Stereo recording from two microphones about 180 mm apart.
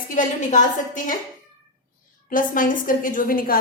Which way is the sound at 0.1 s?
45° left (ahead or behind).